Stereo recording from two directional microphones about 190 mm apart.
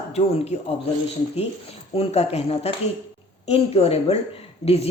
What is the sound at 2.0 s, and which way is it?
Speech, 30° left (ahead or behind).